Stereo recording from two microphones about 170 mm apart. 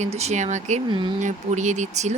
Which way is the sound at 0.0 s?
40° right (ahead or behind).